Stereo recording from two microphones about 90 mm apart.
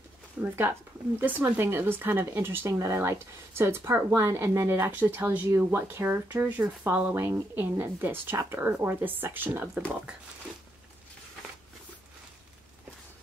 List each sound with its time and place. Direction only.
0.4 s speech: 20° right (ahead or behind)
7.2 s speech: 30° right (ahead or behind)